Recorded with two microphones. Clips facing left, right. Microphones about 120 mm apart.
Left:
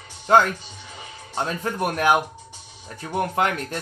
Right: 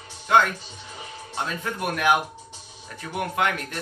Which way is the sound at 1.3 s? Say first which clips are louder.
Left 4 dB; 35° left (ahead or behind).